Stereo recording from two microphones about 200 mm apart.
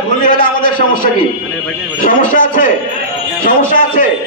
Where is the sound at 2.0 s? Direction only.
45° left (ahead or behind).